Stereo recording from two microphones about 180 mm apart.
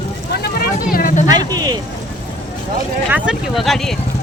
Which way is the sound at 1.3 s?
20° right (ahead or behind).